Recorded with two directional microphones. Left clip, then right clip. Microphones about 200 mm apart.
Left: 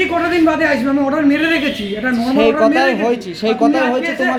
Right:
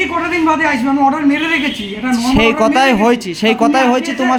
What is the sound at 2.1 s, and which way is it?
A man's voice, 40° right (ahead or behind).